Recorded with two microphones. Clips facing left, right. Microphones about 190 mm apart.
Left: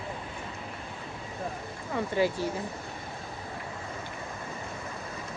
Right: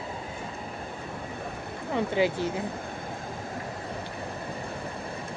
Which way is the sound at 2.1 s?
20° right (ahead or behind).